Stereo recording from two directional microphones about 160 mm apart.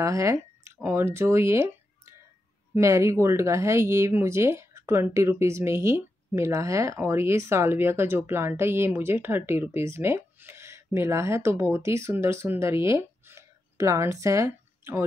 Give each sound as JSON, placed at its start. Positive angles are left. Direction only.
{"t": 0.0, "sound": "a sound", "side_deg": -20}
{"t": 0.8, "sound": "speech", "side_deg": -15}
{"t": 2.7, "sound": "speech", "side_deg": -20}